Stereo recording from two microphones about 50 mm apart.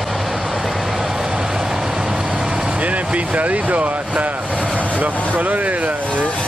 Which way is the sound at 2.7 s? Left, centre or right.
Right.